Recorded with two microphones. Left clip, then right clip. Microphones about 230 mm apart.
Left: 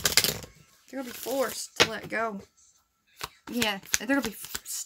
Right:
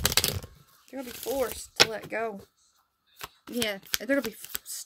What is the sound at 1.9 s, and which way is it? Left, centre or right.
Speech, centre.